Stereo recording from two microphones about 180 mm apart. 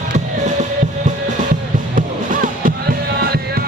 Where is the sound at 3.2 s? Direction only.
60° right (ahead or behind).